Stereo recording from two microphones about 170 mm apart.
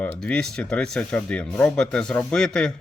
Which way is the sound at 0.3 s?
5° left (ahead or behind).